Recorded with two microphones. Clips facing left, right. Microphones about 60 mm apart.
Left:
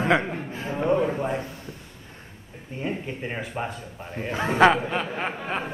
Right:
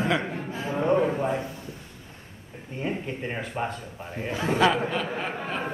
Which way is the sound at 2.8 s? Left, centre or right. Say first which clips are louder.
Even; centre.